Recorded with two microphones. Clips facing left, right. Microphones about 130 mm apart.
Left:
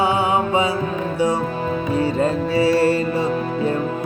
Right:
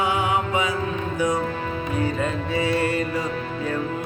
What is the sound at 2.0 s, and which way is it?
Music, 35° left (ahead or behind).